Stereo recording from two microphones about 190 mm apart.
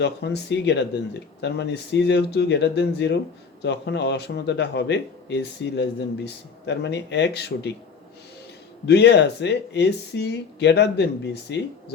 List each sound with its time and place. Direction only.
0.0 s speech: 60° left (ahead or behind)
8.9 s speech: 60° left (ahead or behind)